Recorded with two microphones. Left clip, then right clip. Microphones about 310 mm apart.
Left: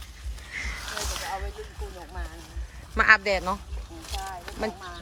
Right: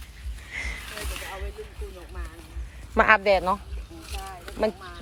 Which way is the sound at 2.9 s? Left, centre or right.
Centre.